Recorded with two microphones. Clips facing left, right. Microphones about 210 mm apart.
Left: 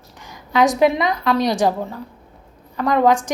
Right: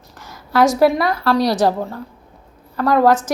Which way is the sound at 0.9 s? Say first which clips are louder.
Right 2 dB; 20° left (ahead or behind).